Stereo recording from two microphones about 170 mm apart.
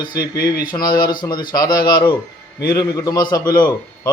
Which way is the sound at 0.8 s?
60° left (ahead or behind).